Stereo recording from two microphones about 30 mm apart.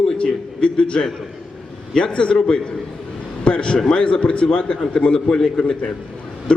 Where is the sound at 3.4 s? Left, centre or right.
Left.